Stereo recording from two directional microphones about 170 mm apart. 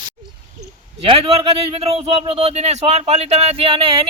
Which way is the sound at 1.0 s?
35° right (ahead or behind).